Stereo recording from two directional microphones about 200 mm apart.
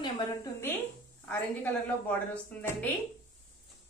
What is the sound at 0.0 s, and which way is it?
A woman's voice, 20° left (ahead or behind).